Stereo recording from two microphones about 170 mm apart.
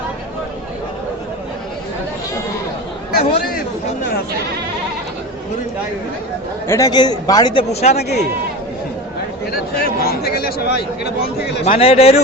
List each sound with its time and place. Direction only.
3.1 s speech: 60° left (ahead or behind)
6.7 s a man's voice: 20° left (ahead or behind)
7.7 s a man's voice: 40° left (ahead or behind)
7.9 s speech: 75° left (ahead or behind)
9.5 s speech: 65° left (ahead or behind)
11.8 s a man's voice: 35° left (ahead or behind)